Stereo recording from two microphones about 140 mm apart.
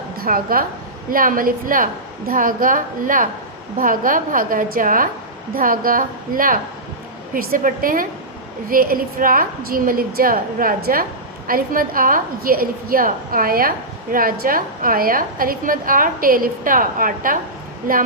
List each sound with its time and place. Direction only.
0.2 s a woman's voice: 90° right